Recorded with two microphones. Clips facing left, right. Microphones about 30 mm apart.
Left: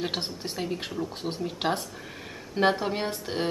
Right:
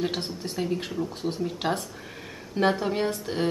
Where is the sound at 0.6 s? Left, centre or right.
Centre.